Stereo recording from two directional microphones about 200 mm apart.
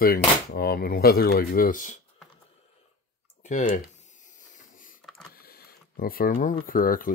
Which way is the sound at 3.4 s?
40° left (ahead or behind).